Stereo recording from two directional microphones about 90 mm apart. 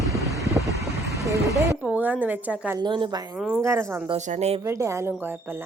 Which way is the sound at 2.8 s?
60° right (ahead or behind).